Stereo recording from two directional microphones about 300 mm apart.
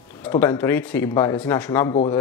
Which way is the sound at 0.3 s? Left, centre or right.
Centre.